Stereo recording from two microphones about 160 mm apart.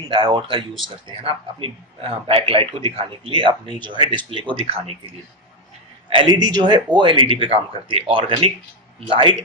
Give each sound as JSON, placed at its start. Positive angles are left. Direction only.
{"t": 0.0, "sound": "a man's voice", "side_deg": -30}